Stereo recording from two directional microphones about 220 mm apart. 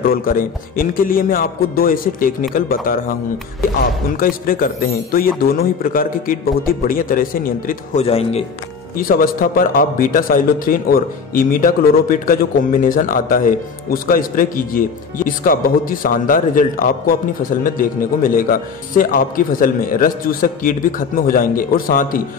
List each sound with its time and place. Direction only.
0.0 s speech: 40° left (ahead or behind)
4.2 s speech: 40° left (ahead or behind)
8.0 s speech: 25° left (ahead or behind)
8.9 s speech: 40° left (ahead or behind)